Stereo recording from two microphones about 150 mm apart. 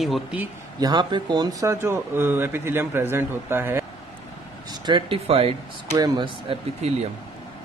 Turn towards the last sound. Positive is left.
turn(degrees=-45)  # may be behind; listen again after turning